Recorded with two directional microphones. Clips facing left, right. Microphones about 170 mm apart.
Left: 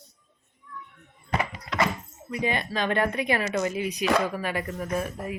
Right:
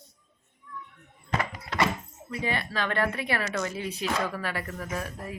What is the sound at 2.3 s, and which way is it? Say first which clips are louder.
Speech: left 3 dB; 20° left (ahead or behind).